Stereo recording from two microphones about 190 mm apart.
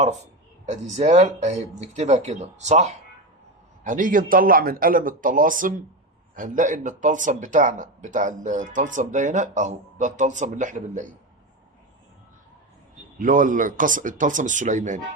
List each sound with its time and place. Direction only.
0.6 s a man's voice: 35° right (ahead or behind)
13.1 s a man's voice: 45° right (ahead or behind)